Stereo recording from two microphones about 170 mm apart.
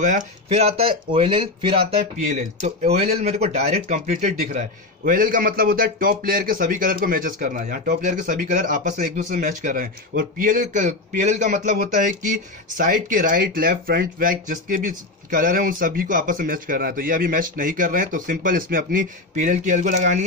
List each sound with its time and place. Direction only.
0.0 s a man's voice: 40° right (ahead or behind)